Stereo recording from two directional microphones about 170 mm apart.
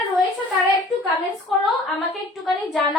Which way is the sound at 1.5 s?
Centre (ahead or behind).